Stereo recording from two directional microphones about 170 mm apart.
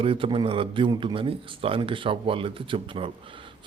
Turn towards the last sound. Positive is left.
turn(degrees=-30)  # may be behind; listen again after turning